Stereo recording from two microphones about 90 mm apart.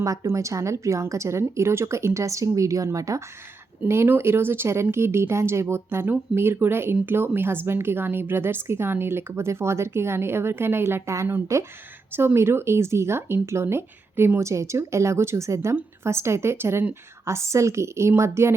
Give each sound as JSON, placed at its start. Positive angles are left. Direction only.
{"t": 0.0, "sound": "speech", "side_deg": -40}
{"t": 3.8, "sound": "speech", "side_deg": -25}